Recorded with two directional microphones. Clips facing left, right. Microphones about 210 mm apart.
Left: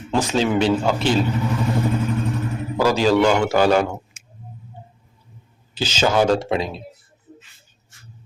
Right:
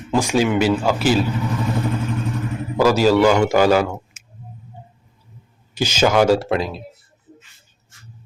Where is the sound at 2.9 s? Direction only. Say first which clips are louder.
Right 2 dB; 10° right (ahead or behind).